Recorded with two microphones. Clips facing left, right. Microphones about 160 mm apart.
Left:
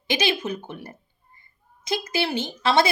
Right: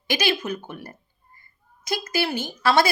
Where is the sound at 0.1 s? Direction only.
25° left (ahead or behind).